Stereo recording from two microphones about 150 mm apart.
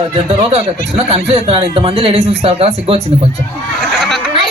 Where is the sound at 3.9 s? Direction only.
Centre (ahead or behind).